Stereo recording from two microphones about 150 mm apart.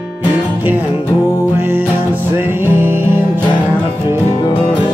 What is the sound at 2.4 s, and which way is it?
Music, 15° right (ahead or behind).